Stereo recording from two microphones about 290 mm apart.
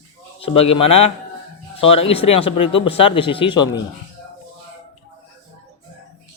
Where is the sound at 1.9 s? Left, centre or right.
Centre.